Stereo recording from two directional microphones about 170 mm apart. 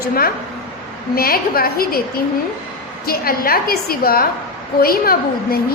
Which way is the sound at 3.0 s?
60° left (ahead or behind).